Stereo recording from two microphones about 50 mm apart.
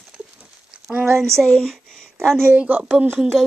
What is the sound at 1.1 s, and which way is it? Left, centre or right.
A woman's voice, centre.